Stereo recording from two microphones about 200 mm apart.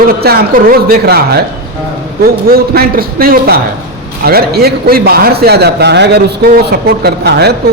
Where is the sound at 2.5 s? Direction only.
50° right (ahead or behind).